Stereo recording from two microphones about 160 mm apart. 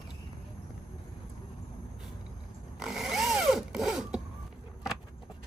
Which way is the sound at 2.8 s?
Centre (ahead or behind).